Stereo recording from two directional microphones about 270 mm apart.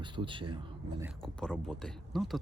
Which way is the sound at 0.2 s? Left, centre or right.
Centre.